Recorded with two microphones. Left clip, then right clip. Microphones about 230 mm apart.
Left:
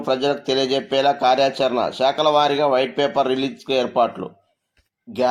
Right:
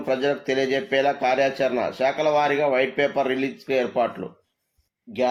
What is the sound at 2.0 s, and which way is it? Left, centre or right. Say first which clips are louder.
Speech: left 4 dB; left.